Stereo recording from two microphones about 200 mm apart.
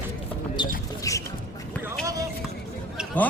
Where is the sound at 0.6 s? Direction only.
25° left (ahead or behind).